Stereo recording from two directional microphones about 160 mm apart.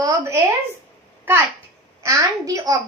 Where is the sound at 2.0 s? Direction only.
20° right (ahead or behind).